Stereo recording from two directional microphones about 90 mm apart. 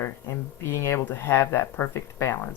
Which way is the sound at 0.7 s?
30° left (ahead or behind).